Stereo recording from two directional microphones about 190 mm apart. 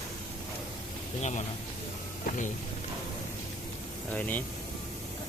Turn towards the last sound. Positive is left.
turn(degrees=10)  # may be behind; listen again after turning